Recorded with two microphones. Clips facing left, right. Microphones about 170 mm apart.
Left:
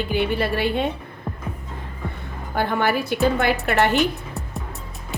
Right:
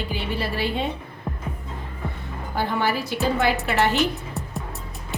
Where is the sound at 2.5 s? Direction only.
55° left (ahead or behind).